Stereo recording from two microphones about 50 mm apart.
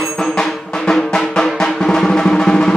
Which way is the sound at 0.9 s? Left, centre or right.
Centre.